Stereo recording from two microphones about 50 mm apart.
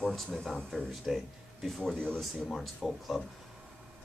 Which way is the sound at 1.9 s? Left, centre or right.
Centre.